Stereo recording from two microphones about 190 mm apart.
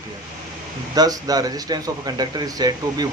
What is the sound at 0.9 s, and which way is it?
Speech, 20° right (ahead or behind).